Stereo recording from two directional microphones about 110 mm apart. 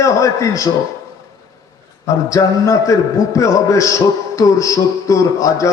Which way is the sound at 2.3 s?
30° left (ahead or behind).